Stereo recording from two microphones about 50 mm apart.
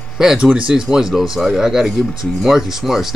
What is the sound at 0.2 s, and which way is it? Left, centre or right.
Speech, centre.